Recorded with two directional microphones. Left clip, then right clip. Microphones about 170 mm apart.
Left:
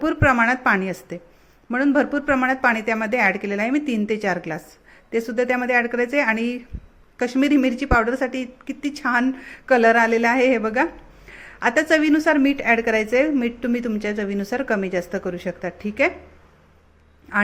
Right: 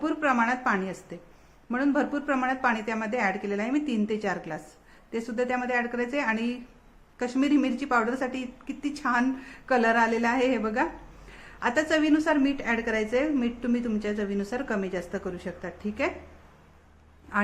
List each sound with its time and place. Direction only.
0.0 s a woman's voice: 30° left (ahead or behind)